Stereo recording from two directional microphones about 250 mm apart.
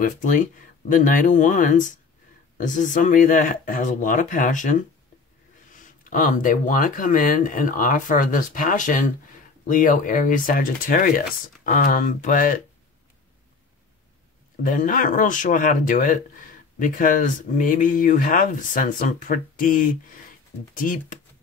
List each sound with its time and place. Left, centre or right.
0.0 s speech: left
14.6 s speech: left